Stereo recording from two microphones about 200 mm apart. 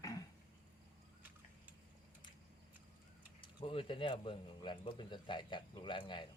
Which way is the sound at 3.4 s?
25° left (ahead or behind).